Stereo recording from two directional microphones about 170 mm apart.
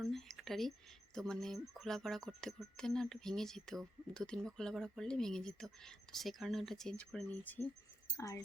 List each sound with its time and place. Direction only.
0.0 s speech: centre (ahead or behind); by 8.4 s 20° left (ahead or behind)